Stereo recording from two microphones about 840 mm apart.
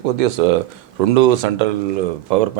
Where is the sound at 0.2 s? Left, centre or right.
Right.